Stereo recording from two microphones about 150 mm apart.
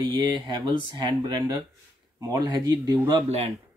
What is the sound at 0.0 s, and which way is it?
Speech, 30° right (ahead or behind).